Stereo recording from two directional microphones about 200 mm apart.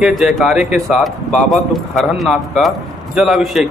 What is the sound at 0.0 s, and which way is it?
A man's voice, centre (ahead or behind).